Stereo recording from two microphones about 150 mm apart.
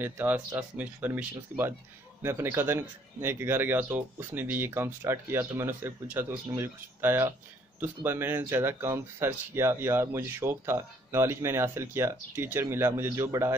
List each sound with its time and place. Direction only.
0.0 s speech: 15° right (ahead or behind)